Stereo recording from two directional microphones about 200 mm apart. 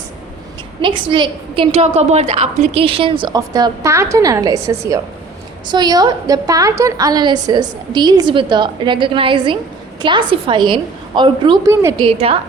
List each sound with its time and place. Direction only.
0.8 s a woman's voice: 25° right (ahead or behind)
12.0 s a woman's voice: 30° right (ahead or behind)